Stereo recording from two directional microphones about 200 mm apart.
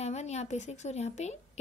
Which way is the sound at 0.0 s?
35° left (ahead or behind).